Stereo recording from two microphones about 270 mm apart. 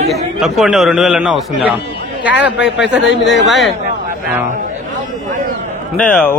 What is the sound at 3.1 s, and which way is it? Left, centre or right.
Speech, left.